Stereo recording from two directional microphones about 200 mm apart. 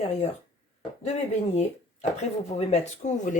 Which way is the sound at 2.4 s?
35° left (ahead or behind).